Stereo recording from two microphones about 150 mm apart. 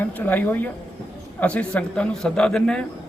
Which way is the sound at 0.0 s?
10° left (ahead or behind).